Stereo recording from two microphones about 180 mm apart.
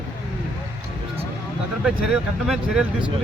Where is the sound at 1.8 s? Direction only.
5° right (ahead or behind).